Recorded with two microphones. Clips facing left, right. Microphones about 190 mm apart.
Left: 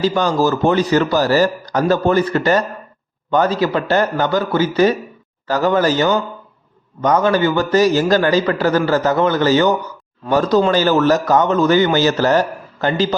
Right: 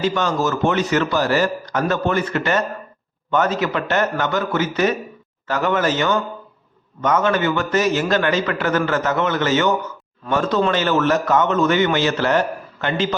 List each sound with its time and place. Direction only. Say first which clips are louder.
0.0 s a man's voice: left 4 dB; 35° left (ahead or behind)